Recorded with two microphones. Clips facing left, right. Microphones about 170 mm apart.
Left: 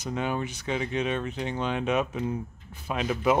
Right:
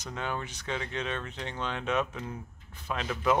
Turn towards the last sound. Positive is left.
turn(degrees=10)  # may be behind; listen again after turning